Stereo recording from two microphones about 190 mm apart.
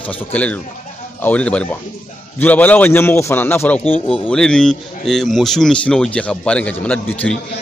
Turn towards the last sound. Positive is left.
turn(degrees=5)  # may be behind; listen again after turning